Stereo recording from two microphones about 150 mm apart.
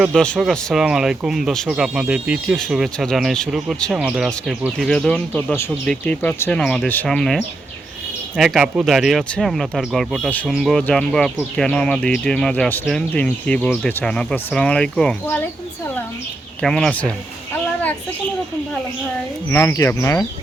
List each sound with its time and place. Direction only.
0.0 s speech: 5° left (ahead or behind)
16.6 s speech: centre (ahead or behind)
19.5 s speech: 15° left (ahead or behind)